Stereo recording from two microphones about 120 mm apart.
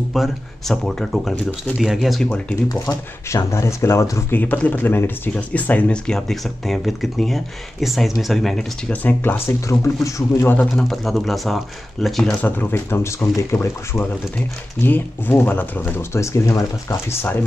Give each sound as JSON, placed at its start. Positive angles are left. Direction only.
{"t": 0.1, "sound": "speech", "side_deg": 0}
{"t": 2.7, "sound": "speech", "side_deg": 25}
{"t": 9.0, "sound": "speech", "side_deg": 15}
{"t": 9.7, "sound": "speech", "side_deg": 25}
{"t": 10.8, "sound": "speech", "side_deg": 0}
{"t": 12.4, "sound": "speech", "side_deg": 20}